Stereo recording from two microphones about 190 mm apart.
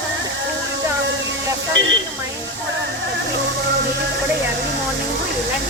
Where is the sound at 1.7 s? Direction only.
80° right.